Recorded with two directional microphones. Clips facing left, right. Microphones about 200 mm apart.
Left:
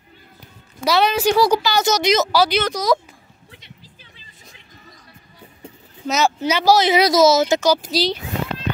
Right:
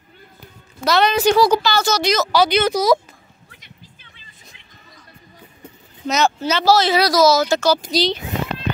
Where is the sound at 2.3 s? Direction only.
5° left (ahead or behind).